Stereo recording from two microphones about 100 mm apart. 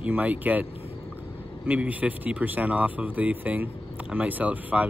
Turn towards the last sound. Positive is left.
turn(degrees=-15)  # may be behind; listen again after turning